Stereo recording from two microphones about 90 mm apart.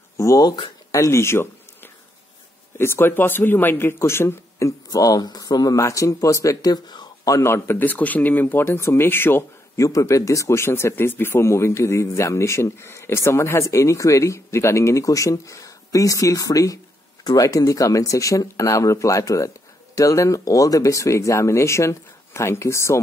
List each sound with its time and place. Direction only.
0.2 s speech: 40° left (ahead or behind)
7.3 s speech: 30° left (ahead or behind)
9.8 s speech: 35° left (ahead or behind)